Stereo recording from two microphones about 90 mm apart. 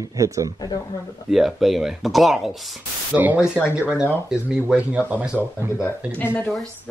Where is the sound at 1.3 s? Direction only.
5° right (ahead or behind).